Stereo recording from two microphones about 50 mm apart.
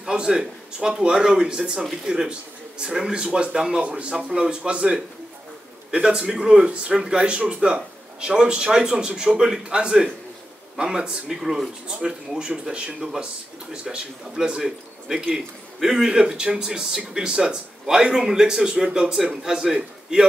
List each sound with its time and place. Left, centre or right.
0.0 s speech: centre